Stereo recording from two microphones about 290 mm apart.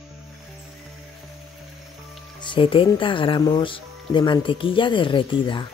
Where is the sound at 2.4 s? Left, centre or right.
Centre.